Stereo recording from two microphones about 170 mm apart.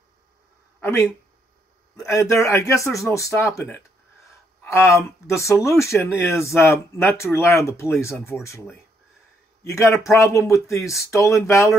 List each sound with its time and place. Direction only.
0.7 s a sound: 5° left (ahead or behind)
2.1 s speech: 20° left (ahead or behind)
5.4 s speech: 15° left (ahead or behind)
9.6 s speech: 15° left (ahead or behind)